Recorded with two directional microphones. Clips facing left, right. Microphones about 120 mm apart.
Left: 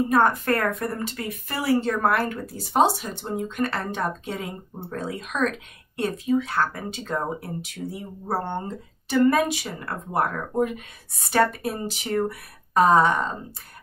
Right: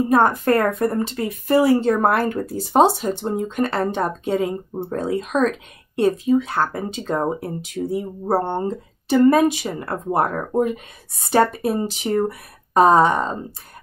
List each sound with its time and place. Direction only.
0.1 s speech: 25° right (ahead or behind)